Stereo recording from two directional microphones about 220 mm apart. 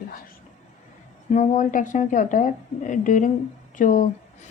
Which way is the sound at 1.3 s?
35° left (ahead or behind).